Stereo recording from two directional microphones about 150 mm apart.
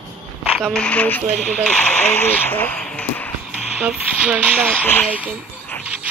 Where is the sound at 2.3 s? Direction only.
10° left (ahead or behind).